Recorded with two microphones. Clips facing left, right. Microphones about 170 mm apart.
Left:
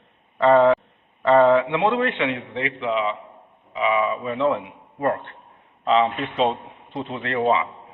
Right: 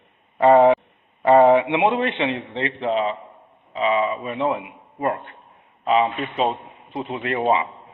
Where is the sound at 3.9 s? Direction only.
30° right (ahead or behind); by 5.3 s 10° right (ahead or behind).